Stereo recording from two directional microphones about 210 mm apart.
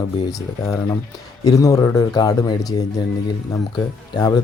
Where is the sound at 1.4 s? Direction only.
15° left (ahead or behind).